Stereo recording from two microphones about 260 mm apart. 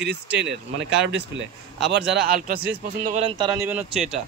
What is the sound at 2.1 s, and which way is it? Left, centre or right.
Speech, right.